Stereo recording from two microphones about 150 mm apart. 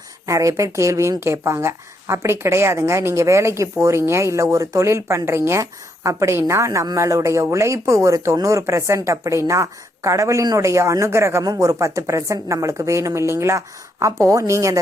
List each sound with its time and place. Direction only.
0.3 s a woman's voice: 20° right (ahead or behind)